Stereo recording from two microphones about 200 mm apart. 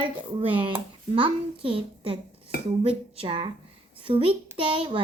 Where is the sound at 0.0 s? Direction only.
25° right (ahead or behind).